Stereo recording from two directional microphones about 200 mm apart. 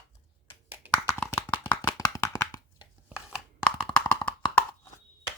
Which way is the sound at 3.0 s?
5° right (ahead or behind).